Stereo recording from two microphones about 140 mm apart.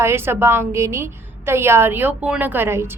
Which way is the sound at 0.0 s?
20° right (ahead or behind).